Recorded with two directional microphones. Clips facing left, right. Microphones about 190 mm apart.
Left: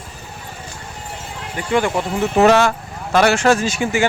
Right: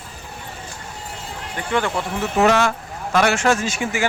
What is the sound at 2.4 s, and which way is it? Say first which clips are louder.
Speech: left 4 dB; 35° left (ahead or behind).